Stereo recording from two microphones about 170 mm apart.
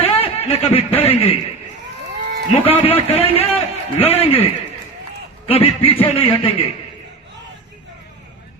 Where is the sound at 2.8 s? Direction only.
35° left (ahead or behind).